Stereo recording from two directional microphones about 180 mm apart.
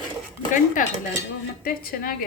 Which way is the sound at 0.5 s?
45° left (ahead or behind).